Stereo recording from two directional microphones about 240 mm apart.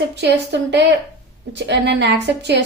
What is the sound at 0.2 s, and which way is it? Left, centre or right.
A woman's voice, right.